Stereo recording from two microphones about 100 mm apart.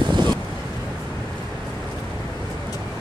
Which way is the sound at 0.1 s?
45° right (ahead or behind).